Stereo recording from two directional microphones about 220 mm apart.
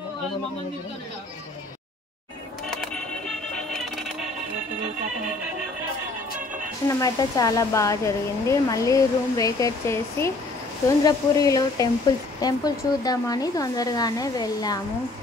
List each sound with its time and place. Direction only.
2.7 s music: centre (ahead or behind)
6.9 s speech: 15° left (ahead or behind)